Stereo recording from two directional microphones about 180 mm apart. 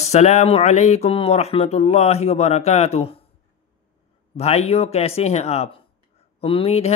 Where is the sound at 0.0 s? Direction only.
40° left (ahead or behind).